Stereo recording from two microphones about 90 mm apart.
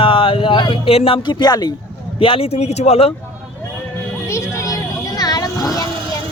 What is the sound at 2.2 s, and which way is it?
Speech, 90° left.